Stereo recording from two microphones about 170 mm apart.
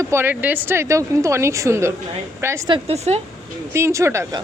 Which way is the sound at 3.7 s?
15° right (ahead or behind).